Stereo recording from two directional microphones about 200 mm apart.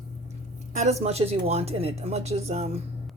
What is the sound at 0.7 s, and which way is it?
Speech, 35° right (ahead or behind).